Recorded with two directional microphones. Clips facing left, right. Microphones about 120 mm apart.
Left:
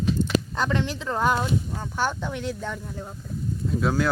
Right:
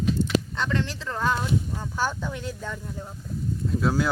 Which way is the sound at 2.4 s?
Centre (ahead or behind).